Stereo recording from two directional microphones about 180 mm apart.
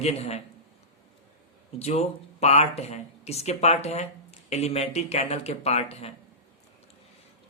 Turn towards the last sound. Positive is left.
turn(degrees=35)  # may be behind; listen again after turning